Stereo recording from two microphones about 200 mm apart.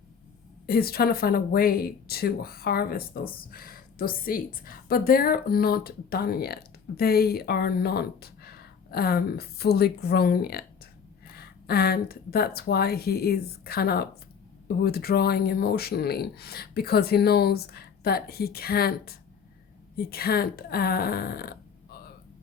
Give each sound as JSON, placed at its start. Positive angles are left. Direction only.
{"t": 0.7, "sound": "speech", "side_deg": 50}